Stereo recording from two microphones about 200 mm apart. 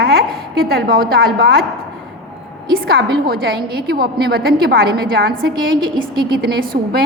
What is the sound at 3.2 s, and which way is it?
A woman's voice, 50° right (ahead or behind).